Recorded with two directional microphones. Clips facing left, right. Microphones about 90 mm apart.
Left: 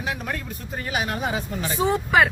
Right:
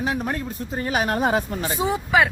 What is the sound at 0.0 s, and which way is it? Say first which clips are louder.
Speech: right 4 dB; 35° right (ahead or behind).